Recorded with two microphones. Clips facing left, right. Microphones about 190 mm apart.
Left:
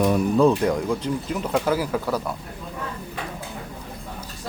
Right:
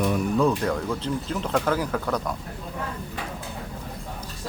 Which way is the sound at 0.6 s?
15° left (ahead or behind).